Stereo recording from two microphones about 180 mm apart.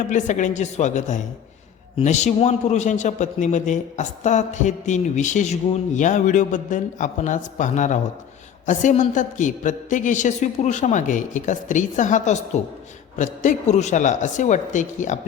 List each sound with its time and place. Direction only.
0.1 s a man's voice: 45° left (ahead or behind)